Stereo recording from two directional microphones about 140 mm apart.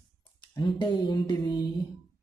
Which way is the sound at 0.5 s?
35° left (ahead or behind).